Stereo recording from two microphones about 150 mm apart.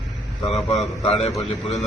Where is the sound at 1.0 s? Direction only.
40° left (ahead or behind).